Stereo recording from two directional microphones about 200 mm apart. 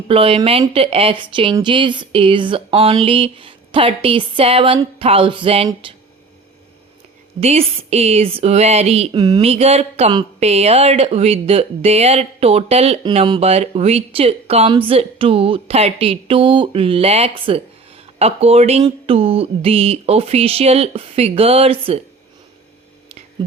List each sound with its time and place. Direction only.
0.1 s speech: 30° right (ahead or behind)
7.3 s speech: 30° right (ahead or behind)